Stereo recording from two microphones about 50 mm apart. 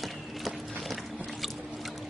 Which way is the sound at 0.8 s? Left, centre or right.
Centre.